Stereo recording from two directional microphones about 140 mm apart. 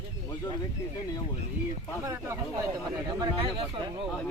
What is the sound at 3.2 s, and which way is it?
Speech, 40° right (ahead or behind).